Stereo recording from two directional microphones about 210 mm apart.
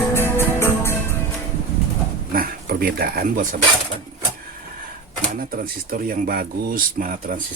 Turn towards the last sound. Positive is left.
turn(degrees=-40)  # may be behind; listen again after turning